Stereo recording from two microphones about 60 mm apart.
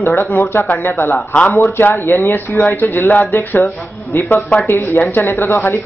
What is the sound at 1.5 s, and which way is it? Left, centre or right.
Speech, left.